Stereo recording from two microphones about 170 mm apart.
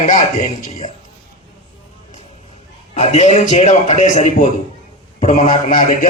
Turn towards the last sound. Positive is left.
turn(degrees=50)  # may be behind; listen again after turning